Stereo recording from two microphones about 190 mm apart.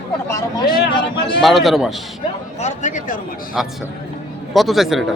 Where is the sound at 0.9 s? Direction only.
25° left (ahead or behind).